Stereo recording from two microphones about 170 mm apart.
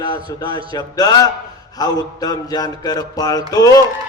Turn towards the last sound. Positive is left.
turn(degrees=20)  # may be behind; listen again after turning